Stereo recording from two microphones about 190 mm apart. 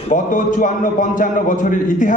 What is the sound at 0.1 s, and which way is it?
A man's voice, 45° left (ahead or behind).